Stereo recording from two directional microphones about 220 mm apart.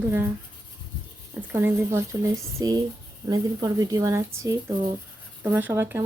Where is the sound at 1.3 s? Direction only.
10° right (ahead or behind).